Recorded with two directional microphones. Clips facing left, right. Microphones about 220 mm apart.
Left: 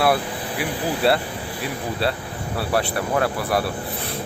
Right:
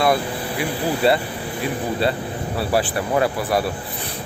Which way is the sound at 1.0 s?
Centre (ahead or behind).